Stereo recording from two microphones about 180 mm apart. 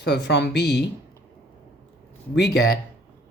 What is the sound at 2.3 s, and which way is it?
Speech, 65° left (ahead or behind).